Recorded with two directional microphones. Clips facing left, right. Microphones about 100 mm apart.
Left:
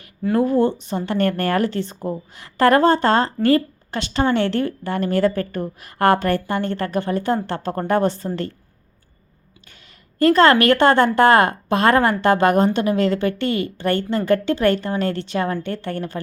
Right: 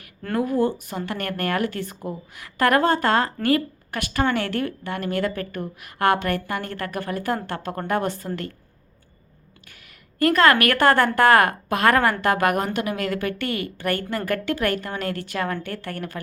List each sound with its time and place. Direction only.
0.3 s a woman's voice: 30° left (ahead or behind)
10.2 s a woman's voice: 30° left (ahead or behind)